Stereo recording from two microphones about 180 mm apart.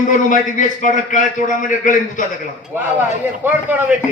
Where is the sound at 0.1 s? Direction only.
45° left (ahead or behind).